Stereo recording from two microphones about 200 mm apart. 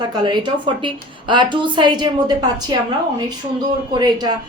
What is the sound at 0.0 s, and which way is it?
A woman's voice, 20° right (ahead or behind).